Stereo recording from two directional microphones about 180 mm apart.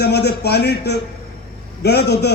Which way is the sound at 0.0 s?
65° left (ahead or behind).